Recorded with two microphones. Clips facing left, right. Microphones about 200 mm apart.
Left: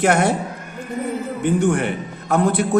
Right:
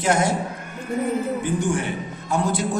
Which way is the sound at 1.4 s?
60° left (ahead or behind).